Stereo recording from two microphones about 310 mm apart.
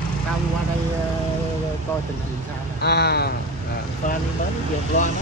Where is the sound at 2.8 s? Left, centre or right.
Left.